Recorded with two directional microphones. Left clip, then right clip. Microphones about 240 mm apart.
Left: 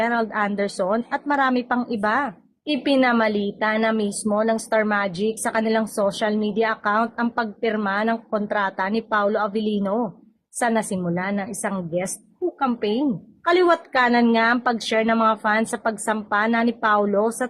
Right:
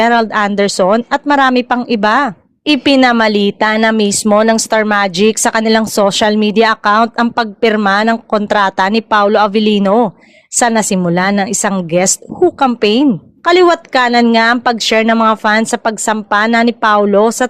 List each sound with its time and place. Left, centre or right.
0.0 s speech: right